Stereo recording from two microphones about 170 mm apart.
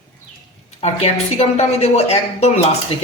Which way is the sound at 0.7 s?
35° left (ahead or behind).